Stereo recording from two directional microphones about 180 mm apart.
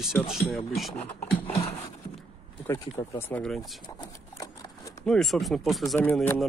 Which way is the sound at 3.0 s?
15° left (ahead or behind).